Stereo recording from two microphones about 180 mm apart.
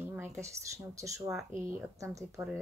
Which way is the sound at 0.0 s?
15° right (ahead or behind).